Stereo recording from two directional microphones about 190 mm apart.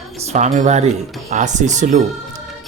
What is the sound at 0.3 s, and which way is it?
A woman's voice, 40° right (ahead or behind).